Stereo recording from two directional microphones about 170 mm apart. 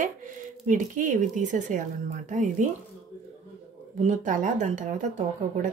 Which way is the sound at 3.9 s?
45° right (ahead or behind).